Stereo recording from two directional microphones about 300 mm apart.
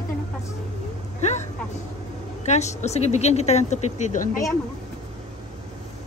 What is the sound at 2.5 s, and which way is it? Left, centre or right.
Speech, left.